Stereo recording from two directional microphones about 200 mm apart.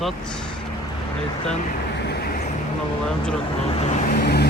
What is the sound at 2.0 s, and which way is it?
Vehicle, 50° left (ahead or behind).